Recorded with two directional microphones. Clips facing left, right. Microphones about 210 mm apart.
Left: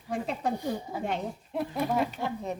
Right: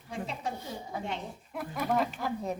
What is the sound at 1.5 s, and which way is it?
Speech, 25° left (ahead or behind).